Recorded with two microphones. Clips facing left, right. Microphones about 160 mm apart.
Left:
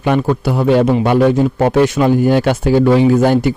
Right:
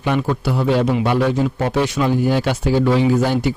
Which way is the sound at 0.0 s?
50° left (ahead or behind).